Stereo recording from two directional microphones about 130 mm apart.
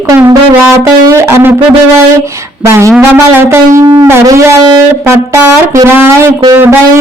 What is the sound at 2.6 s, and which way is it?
Music, 20° right (ahead or behind).